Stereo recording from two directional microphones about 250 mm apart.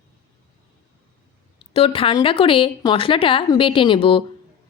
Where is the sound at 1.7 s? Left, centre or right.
Left.